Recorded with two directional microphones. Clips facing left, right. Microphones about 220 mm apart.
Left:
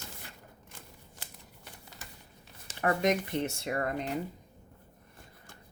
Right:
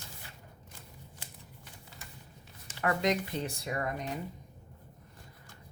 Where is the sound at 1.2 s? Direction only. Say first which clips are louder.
Even; 70° left (ahead or behind).